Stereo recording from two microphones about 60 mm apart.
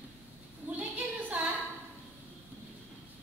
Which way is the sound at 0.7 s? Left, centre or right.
Right.